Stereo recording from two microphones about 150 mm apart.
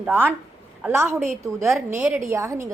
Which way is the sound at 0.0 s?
10° right (ahead or behind).